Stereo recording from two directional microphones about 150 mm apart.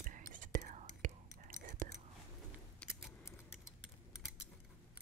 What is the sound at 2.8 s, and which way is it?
Keys jangling, 10° left (ahead or behind).